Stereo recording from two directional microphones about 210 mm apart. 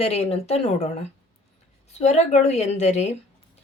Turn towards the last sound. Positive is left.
turn(degrees=30)  # may be behind; listen again after turning